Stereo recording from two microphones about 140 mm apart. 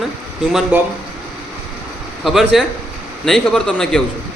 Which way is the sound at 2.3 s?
Centre (ahead or behind).